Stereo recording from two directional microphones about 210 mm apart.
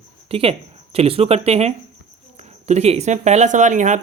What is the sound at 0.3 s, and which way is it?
Speech, 25° right (ahead or behind).